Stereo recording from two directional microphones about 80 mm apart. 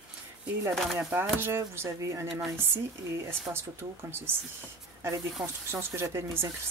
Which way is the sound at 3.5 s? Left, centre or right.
Right.